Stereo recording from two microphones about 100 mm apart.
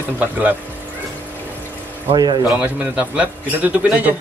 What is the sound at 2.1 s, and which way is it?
Speech, 45° right (ahead or behind).